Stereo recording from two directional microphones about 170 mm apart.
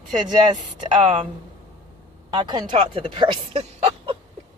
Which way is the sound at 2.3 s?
25° right (ahead or behind).